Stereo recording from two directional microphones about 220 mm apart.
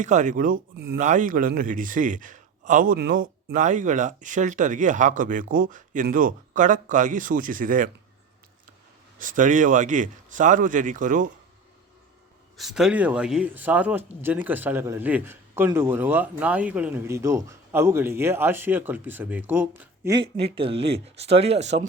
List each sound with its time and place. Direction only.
0.0 s a man's voice: 35° right (ahead or behind)
9.1 s a man's voice: 35° right (ahead or behind)
12.5 s a man's voice: centre (ahead or behind)
20.1 s speech: 25° right (ahead or behind)